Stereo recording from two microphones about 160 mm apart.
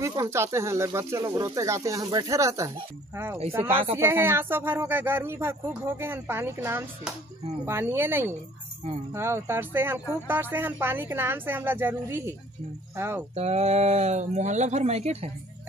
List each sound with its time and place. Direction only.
0.0 s speech: 20° right (ahead or behind)
3.9 s speech: 15° right (ahead or behind)
13.4 s speech: 40° right (ahead or behind)